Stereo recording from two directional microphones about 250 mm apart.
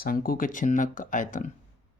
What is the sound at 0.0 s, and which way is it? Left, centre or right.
Speech, left.